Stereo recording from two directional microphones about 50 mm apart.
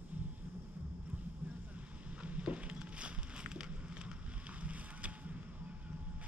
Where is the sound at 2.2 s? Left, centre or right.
Right.